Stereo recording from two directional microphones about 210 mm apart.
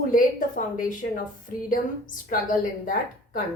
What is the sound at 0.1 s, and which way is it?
A woman's voice, 40° left (ahead or behind).